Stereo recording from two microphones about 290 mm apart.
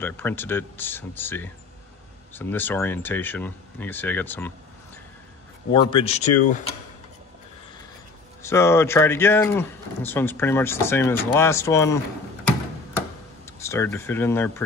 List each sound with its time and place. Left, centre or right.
0.0 s speech: centre
5.7 s speech: centre
8.4 s speech: centre
13.5 s speech: centre